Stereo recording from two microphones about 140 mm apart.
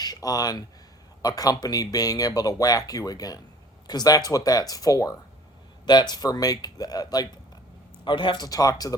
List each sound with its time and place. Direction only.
0.0 s speech: 25° left (ahead or behind)